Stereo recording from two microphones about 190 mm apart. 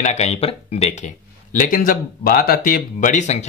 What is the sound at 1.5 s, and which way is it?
Speech, 45° left (ahead or behind).